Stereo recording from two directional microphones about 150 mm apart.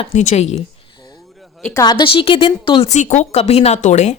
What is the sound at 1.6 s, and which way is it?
Speech, 25° left (ahead or behind).